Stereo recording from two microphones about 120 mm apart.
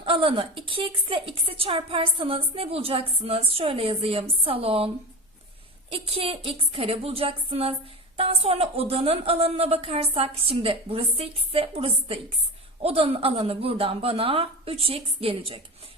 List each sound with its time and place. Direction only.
0.0 s a woman's voice: 50° right (ahead or behind)
5.9 s a woman's voice: 50° right (ahead or behind)